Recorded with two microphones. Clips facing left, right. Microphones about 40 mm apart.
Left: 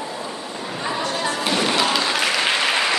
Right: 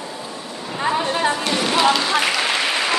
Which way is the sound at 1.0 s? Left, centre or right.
Right.